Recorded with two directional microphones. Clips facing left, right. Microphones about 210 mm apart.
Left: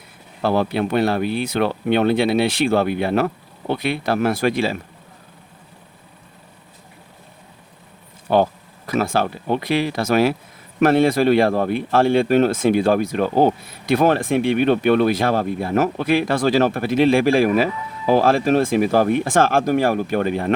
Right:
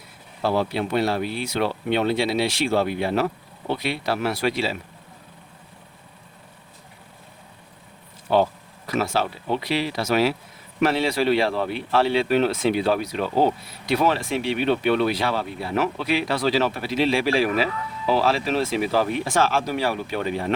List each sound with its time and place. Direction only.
0.4 s speech: 55° left (ahead or behind)
8.3 s speech: 50° left (ahead or behind)